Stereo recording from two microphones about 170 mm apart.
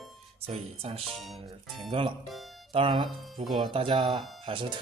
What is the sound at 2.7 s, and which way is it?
Speech, 30° right (ahead or behind).